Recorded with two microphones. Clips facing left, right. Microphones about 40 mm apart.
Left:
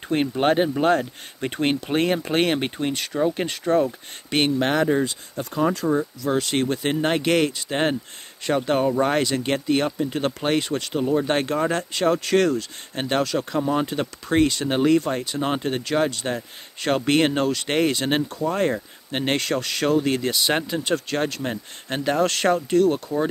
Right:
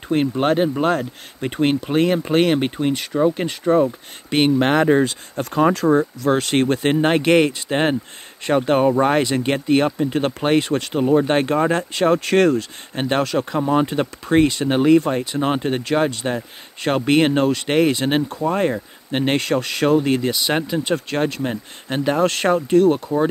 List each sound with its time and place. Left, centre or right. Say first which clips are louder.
0.4 s speech: left 1 dB; centre
4.5 s speech: right 5 dB; right
4.8 s speech: right 5 dB; right
5.8 s speech: right 6 dB; right
6.2 s speech: right 5 dB; right
12.9 s speech: right 3 dB; centre
13.2 s speech: right 3 dB; right
13.5 s speech: right 4 dB; right; by 20.9 s centre
20.9 s speech: right 2 dB; centre
22.2 s speech: right 2 dB; centre